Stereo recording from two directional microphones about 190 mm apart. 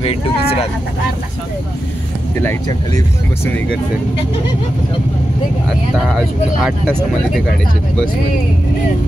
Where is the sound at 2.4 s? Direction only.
15° left (ahead or behind).